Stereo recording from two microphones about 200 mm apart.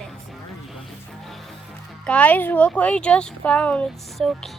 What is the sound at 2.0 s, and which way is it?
Speech, 5° left (ahead or behind).